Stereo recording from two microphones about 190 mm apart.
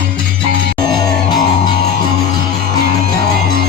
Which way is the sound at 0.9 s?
20° left (ahead or behind).